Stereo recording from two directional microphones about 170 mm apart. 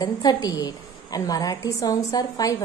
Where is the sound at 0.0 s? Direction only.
25° left (ahead or behind).